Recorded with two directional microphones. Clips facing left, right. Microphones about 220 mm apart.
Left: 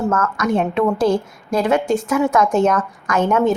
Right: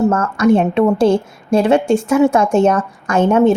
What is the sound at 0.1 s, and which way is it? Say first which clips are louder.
A woman's voice: right 6 dB; 30° right (ahead or behind).